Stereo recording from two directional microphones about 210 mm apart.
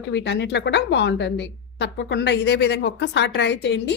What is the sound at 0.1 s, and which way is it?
A woman's voice, 55° left (ahead or behind).